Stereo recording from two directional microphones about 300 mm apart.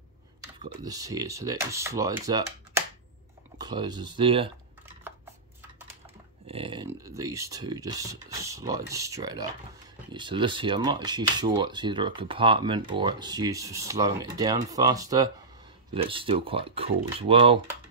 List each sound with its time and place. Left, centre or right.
0.6 s speech: centre
6.4 s speech: centre